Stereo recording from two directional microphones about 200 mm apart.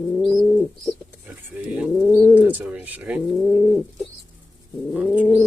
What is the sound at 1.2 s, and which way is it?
Speech, 5° right (ahead or behind).